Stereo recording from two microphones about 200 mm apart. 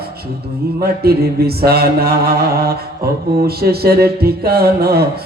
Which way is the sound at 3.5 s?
50° right (ahead or behind).